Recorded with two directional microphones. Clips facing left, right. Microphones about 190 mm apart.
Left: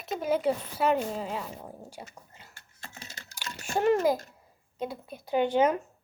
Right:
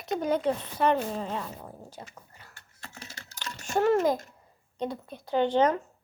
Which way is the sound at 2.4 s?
25° left (ahead or behind).